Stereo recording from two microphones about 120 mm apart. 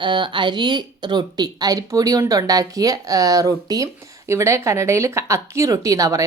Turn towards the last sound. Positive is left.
turn(degrees=-25)  # may be behind; listen again after turning